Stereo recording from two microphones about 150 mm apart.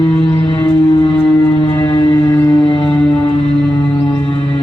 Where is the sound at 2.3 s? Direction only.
10° left (ahead or behind).